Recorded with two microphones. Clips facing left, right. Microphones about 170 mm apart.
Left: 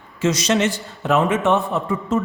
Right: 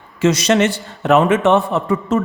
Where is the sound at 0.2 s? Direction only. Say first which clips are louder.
Right 4 dB; 65° right (ahead or behind).